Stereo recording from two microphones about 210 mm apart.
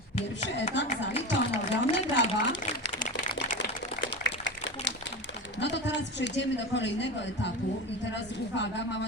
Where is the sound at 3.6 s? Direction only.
60° left (ahead or behind).